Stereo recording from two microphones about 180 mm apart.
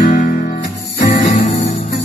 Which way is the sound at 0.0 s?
45° left (ahead or behind).